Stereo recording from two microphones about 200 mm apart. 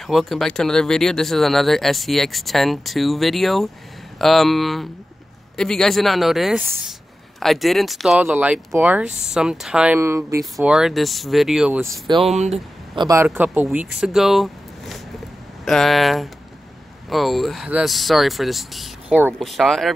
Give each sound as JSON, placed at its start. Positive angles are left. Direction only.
{"t": 0.0, "sound": "speech", "side_deg": 0}
{"t": 10.4, "sound": "speech", "side_deg": 0}
{"t": 12.3, "sound": "speech", "side_deg": -35}
{"t": 13.0, "sound": "speech", "side_deg": -15}